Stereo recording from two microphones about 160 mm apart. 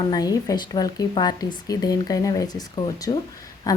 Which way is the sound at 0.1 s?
25° left (ahead or behind).